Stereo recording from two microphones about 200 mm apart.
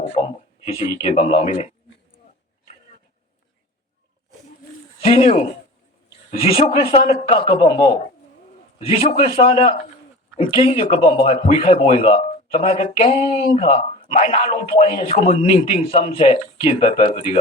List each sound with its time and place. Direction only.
0.0 s a man's voice: 30° left (ahead or behind)
5.0 s a man's voice: 30° left (ahead or behind)
6.6 s a man's voice: 30° left (ahead or behind)